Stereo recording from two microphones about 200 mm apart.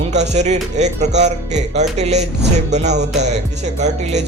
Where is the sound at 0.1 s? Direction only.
35° right (ahead or behind).